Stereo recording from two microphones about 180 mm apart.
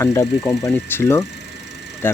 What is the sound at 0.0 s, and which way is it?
Speech, 15° left (ahead or behind).